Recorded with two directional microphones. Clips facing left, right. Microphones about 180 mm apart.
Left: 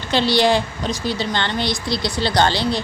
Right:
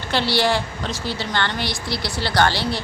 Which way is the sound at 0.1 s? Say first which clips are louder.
Left 4 dB; 20° left (ahead or behind).